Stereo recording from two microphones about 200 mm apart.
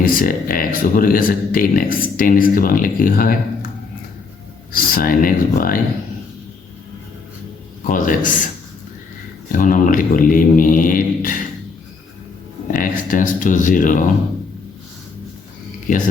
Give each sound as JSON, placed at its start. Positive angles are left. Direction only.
{"t": 0.0, "sound": "speech", "side_deg": 45}
{"t": 4.7, "sound": "speech", "side_deg": 45}
{"t": 7.9, "sound": "speech", "side_deg": 40}
{"t": 9.5, "sound": "speech", "side_deg": 40}
{"t": 12.7, "sound": "speech", "side_deg": 45}
{"t": 15.9, "sound": "speech", "side_deg": 40}